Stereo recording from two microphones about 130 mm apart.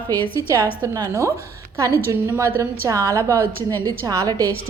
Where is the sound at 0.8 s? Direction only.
25° right (ahead or behind).